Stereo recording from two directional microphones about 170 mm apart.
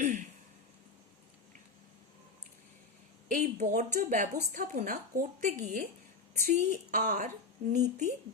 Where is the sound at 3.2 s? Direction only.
50° right (ahead or behind).